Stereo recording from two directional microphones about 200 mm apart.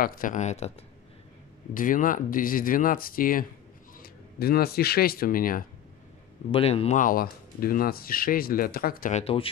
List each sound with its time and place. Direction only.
0.0 s speech: 45° left (ahead or behind)
6.5 s speech: 30° left (ahead or behind); by 9.2 s 45° left (ahead or behind)
9.2 s speech: 30° left (ahead or behind)